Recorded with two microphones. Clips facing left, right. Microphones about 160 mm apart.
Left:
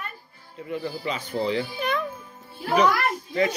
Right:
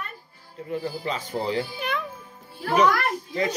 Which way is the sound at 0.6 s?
35° right (ahead or behind).